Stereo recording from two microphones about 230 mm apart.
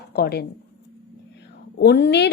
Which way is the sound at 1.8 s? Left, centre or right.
Left.